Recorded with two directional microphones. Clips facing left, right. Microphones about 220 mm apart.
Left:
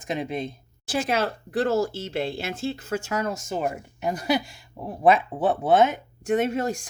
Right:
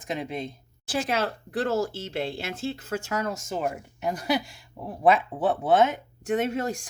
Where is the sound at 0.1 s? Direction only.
20° left (ahead or behind).